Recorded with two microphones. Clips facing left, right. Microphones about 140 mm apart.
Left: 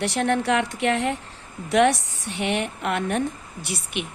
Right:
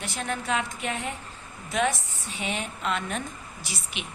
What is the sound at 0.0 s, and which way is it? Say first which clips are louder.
A woman's voice: left 10 dB; 75° left (ahead or behind).